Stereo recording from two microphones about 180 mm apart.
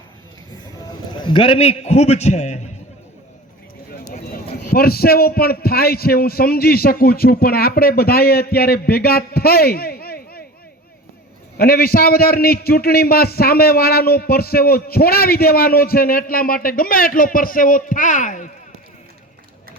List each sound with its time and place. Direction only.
1.2 s a man's voice: 30° left (ahead or behind)
4.7 s a man's voice: 55° left (ahead or behind)
11.5 s a man's voice: 55° left (ahead or behind)